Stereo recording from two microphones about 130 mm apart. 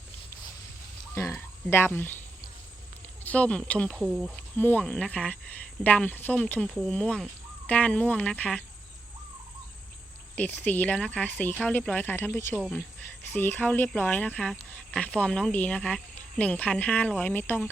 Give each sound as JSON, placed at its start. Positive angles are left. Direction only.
{"t": 1.1, "sound": "frog", "side_deg": 20}
{"t": 1.6, "sound": "speech", "side_deg": 15}
{"t": 3.2, "sound": "speech", "side_deg": 10}
{"t": 3.9, "sound": "speech", "side_deg": -5}
{"t": 4.4, "sound": "speech", "side_deg": 15}
{"t": 10.3, "sound": "speech", "side_deg": 10}